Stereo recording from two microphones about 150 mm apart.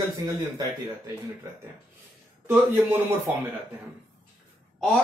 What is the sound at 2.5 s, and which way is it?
Speech, 15° right (ahead or behind).